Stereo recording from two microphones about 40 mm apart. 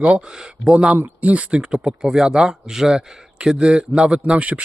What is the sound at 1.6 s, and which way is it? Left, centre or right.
Speech, centre.